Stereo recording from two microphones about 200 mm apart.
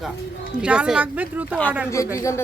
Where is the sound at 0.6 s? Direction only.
5° right (ahead or behind).